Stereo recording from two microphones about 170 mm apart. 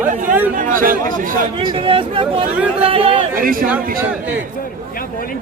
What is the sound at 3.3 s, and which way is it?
Speech, 55° right (ahead or behind).